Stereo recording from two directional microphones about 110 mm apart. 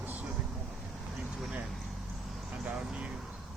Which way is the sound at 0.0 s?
15° right (ahead or behind).